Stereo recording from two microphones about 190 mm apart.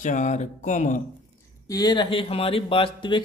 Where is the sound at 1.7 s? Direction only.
20° left (ahead or behind).